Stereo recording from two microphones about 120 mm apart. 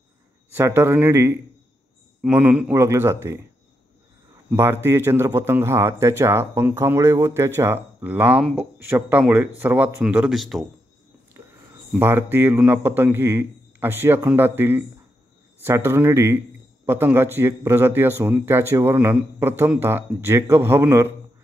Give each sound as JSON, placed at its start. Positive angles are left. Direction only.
{"t": 0.6, "sound": "speech", "side_deg": -20}
{"t": 4.5, "sound": "a man's voice", "side_deg": -20}
{"t": 10.3, "sound": "a man's voice", "side_deg": 0}
{"t": 11.4, "sound": "a sound", "side_deg": -20}
{"t": 12.0, "sound": "a man's voice", "side_deg": -20}